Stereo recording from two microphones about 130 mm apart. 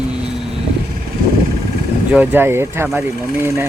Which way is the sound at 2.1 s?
10° right (ahead or behind).